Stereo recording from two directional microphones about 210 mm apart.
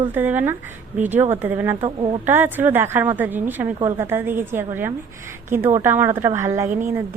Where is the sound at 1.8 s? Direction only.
25° right (ahead or behind).